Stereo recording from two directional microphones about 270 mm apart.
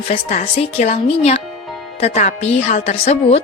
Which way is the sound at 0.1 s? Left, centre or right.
Left.